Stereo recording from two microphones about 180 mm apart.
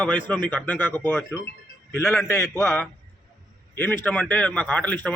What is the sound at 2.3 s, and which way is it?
A man's voice, 15° left (ahead or behind).